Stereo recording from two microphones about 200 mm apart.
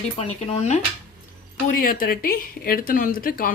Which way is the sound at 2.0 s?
45° left (ahead or behind).